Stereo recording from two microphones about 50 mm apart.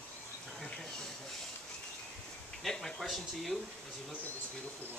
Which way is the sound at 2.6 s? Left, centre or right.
Centre.